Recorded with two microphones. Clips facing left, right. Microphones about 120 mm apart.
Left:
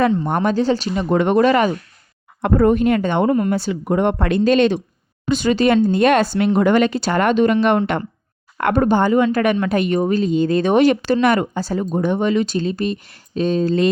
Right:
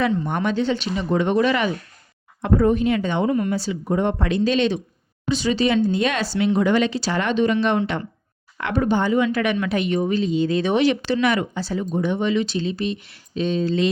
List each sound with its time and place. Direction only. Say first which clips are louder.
0.0 s speech: left 4 dB; 45° left (ahead or behind)
1.1 s speech: left 5 dB; 55° left (ahead or behind)
2.4 s speech: left 3 dB; 60° left (ahead or behind)